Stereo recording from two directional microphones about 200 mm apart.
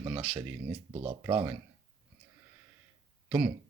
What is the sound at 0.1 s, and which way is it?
Speech, 5° right (ahead or behind).